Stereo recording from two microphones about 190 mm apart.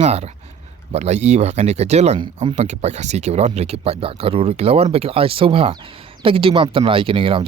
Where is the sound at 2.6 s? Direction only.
35° right (ahead or behind).